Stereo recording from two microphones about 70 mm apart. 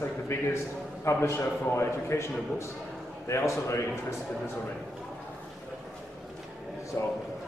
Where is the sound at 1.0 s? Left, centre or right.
Left.